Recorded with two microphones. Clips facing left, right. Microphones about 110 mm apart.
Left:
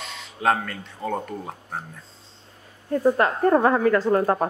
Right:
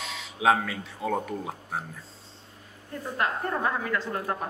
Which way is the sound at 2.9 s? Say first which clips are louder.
Left 10 dB; 60° left (ahead or behind).